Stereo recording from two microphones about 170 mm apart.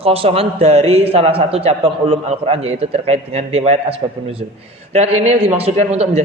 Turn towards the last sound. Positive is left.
turn(degrees=-40)  # may be behind; listen again after turning